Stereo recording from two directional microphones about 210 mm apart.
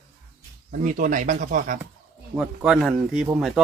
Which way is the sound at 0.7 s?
40° right (ahead or behind).